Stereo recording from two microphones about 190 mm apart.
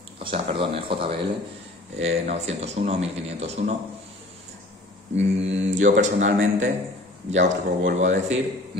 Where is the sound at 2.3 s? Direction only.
35° right (ahead or behind).